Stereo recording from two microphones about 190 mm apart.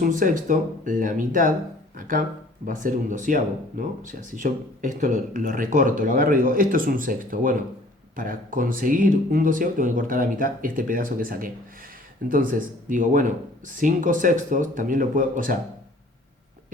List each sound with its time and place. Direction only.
0.0 s speech: 45° right (ahead or behind)